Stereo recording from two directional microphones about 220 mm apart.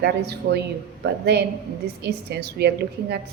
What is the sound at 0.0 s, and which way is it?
Speech, 50° right (ahead or behind).